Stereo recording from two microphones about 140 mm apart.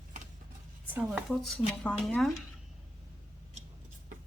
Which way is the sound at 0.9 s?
5° right (ahead or behind).